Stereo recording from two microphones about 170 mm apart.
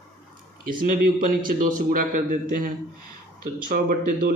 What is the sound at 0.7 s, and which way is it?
A man's voice, 55° right (ahead or behind).